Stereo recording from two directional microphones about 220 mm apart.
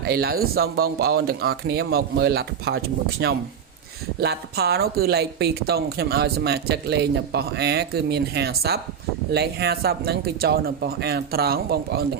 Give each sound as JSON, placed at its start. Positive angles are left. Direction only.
{"t": 0.0, "sound": "a woman's voice", "side_deg": -45}